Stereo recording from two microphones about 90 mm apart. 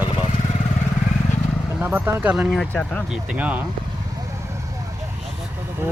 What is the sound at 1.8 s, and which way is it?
Speech, 20° right (ahead or behind).